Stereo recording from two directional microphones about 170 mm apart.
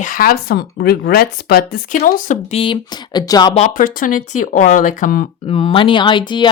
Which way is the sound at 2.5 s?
30° left (ahead or behind).